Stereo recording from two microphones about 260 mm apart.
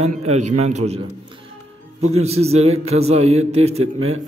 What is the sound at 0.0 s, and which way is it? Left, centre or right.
A man's voice, right.